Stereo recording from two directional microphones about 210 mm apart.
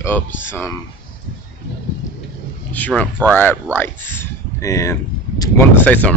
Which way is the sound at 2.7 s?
10° left (ahead or behind).